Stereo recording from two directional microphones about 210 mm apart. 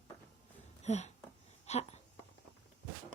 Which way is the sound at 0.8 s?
35° left (ahead or behind).